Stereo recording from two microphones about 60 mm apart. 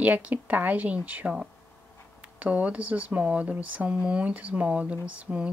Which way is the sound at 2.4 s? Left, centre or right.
Right.